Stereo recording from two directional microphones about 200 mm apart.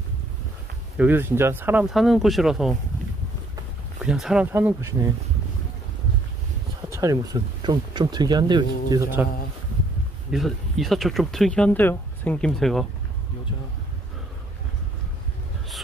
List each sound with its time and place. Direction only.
0.9 s speech: 10° right (ahead or behind)
4.0 s speech: 5° right (ahead or behind)
6.9 s speech: 15° right (ahead or behind)
10.3 s speech: centre (ahead or behind)